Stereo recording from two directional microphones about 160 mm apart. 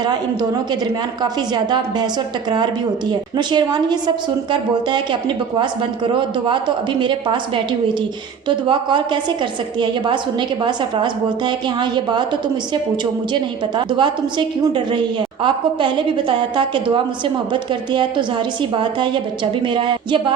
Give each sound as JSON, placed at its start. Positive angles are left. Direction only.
{"t": 1.2, "sound": "a woman's voice", "side_deg": -25}
{"t": 3.1, "sound": "a woman's voice", "side_deg": -25}
{"t": 6.1, "sound": "a woman's voice", "side_deg": -30}